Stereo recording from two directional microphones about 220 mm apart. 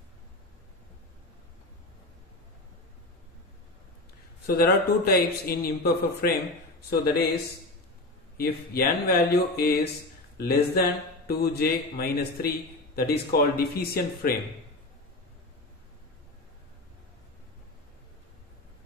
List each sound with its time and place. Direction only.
4.5 s a man's voice: 45° left (ahead or behind)
8.4 s a man's voice: 45° left (ahead or behind)